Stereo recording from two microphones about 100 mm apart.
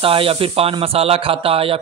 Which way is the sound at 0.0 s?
65° right (ahead or behind).